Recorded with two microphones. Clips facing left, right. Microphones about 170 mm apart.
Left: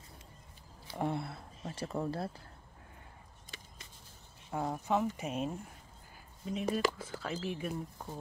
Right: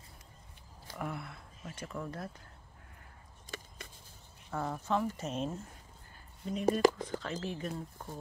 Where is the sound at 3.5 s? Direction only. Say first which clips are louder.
Right 8 dB; 55° right (ahead or behind).